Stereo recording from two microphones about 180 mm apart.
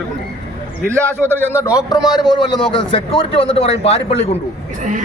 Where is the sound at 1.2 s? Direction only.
15° left (ahead or behind).